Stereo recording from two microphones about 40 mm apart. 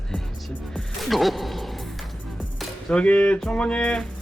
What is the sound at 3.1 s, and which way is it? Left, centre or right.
Music, left.